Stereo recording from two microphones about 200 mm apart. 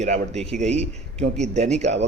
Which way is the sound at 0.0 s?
35° right (ahead or behind).